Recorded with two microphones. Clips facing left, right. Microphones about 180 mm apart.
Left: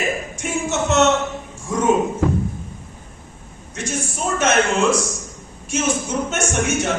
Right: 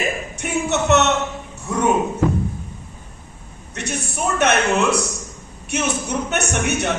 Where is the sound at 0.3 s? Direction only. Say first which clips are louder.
Right 4 dB; 65° right (ahead or behind).